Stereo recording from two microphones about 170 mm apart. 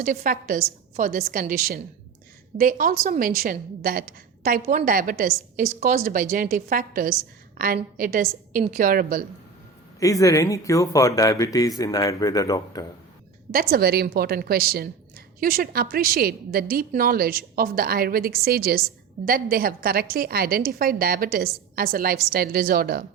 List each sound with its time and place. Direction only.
0.0 s a woman's voice: 55° right (ahead or behind)
4.6 s a woman's voice: 40° right (ahead or behind)
4.9 s a woman's voice: 55° right (ahead or behind)
10.0 s speech: 20° left (ahead or behind)
13.5 s a woman's voice: 60° right (ahead or behind)